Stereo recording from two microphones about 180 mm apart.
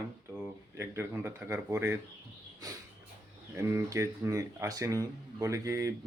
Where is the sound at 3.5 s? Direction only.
15° right (ahead or behind).